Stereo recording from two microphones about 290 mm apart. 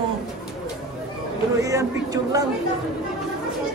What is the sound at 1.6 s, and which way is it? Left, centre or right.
Speech, centre.